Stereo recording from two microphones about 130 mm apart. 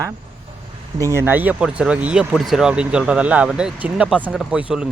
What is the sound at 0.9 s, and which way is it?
Speech, 20° right (ahead or behind).